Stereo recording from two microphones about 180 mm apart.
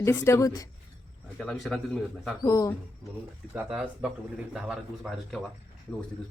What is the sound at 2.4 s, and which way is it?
Speech, 15° left (ahead or behind).